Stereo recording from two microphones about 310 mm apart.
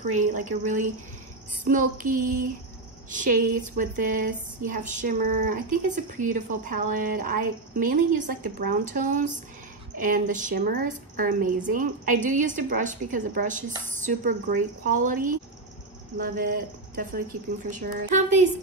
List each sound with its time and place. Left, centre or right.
0.2 s speech: right